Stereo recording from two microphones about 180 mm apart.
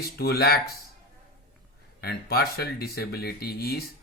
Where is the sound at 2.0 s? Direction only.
60° left (ahead or behind).